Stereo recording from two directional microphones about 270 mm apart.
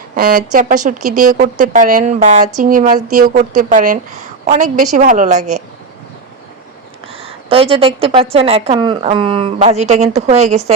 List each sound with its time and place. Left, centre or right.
0.2 s a woman's voice: right
7.1 s a woman's voice: right